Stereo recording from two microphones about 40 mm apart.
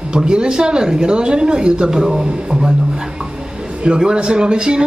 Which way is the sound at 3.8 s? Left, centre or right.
Right.